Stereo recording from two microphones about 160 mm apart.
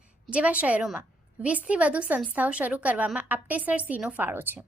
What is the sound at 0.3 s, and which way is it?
A woman's voice, 10° right (ahead or behind).